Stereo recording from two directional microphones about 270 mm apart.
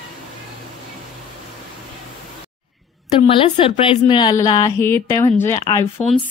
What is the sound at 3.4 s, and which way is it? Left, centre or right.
A woman's voice, centre.